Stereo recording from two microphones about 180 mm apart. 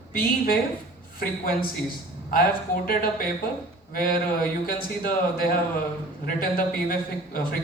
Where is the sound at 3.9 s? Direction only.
50° left (ahead or behind).